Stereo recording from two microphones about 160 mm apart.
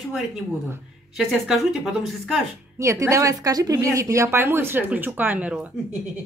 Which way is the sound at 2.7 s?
20° right (ahead or behind).